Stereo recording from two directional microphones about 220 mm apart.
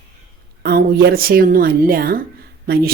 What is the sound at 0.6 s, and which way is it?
Speech, 45° right (ahead or behind).